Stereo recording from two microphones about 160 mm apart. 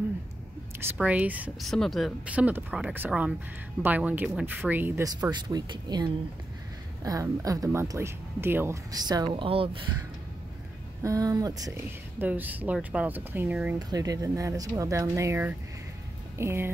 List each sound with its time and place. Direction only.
0.9 s speech: 10° right (ahead or behind)
1.6 s speech: centre (ahead or behind)
8.9 s speech: 25° right (ahead or behind)
11.0 s speech: 20° right (ahead or behind)
13.7 s speech: 25° right (ahead or behind)